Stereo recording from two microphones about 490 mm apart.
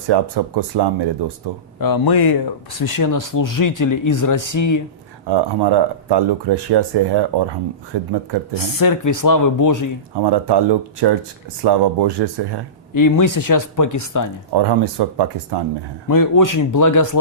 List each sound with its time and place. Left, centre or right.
0.1 s speech: right
1.8 s speech: left
5.2 s speech: right
8.5 s speech: left
10.2 s speech: right
12.9 s speech: left
14.5 s speech: right
16.0 s speech: left